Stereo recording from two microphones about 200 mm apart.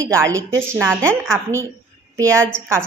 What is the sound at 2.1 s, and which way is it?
Speech, 15° right (ahead or behind).